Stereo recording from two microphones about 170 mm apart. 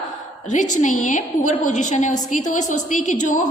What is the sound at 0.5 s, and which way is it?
A woman's voice, 45° left (ahead or behind).